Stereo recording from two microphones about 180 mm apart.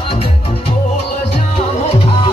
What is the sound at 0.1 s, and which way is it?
Music, 30° left (ahead or behind).